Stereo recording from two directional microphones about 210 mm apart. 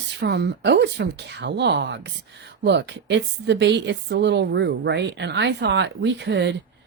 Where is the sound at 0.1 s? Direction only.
55° right (ahead or behind).